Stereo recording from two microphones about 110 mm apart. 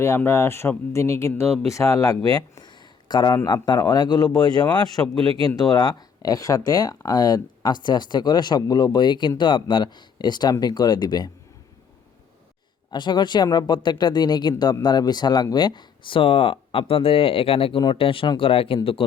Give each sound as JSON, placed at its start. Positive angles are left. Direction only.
{"t": 0.0, "sound": "speech", "side_deg": 25}
{"t": 5.1, "sound": "speech", "side_deg": -60}
{"t": 5.5, "sound": "speech", "side_deg": 35}
{"t": 12.9, "sound": "speech", "side_deg": 45}